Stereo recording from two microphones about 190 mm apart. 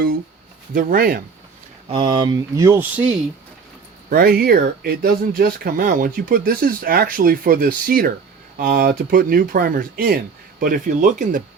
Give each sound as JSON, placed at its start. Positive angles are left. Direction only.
{"t": 0.7, "sound": "speech", "side_deg": -45}
{"t": 1.9, "sound": "speech", "side_deg": -25}
{"t": 4.1, "sound": "speech", "side_deg": -55}